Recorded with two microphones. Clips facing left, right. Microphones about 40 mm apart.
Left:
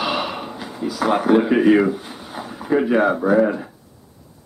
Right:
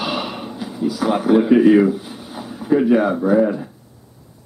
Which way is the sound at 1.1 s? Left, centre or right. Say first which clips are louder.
Right 2 dB; centre.